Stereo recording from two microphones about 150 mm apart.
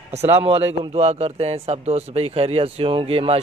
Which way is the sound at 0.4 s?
40° right (ahead or behind).